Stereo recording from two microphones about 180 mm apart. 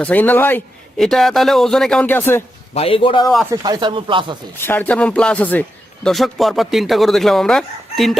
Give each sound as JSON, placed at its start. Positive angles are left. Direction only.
{"t": 0.0, "sound": "a man's voice", "side_deg": 10}
{"t": 2.7, "sound": "a man's voice", "side_deg": 30}
{"t": 3.5, "sound": "speech", "side_deg": -25}
{"t": 4.6, "sound": "speech", "side_deg": 10}